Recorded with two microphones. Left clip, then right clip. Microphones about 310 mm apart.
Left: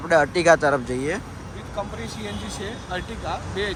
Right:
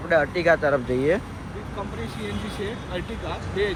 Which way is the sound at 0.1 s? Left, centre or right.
Centre.